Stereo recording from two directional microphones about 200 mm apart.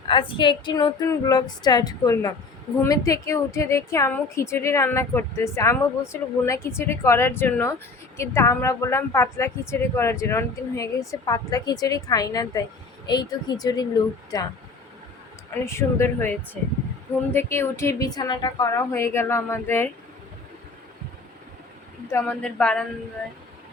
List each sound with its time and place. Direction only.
0.1 s a woman's voice: 25° left (ahead or behind)
15.6 s a woman's voice: 15° left (ahead or behind)
17.3 s a woman's voice: 15° left (ahead or behind)
22.1 s speech: 5° left (ahead or behind)